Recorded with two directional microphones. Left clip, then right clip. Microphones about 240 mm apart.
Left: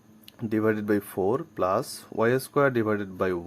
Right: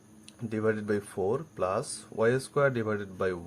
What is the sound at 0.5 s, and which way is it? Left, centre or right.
Speech, left.